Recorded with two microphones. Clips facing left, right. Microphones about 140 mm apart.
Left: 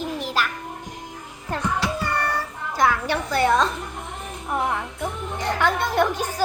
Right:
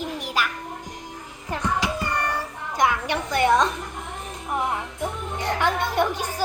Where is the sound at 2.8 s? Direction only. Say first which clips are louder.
Left 1 dB; 20° right (ahead or behind).